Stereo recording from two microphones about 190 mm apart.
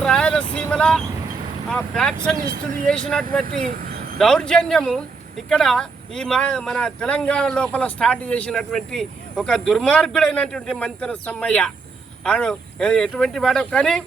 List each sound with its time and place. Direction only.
0.0 s speech: 5° left (ahead or behind)
3.4 s vehicle: 45° right (ahead or behind)
4.2 s speech: 5° left (ahead or behind)